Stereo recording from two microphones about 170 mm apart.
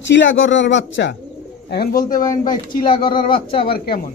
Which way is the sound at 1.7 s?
65° left (ahead or behind).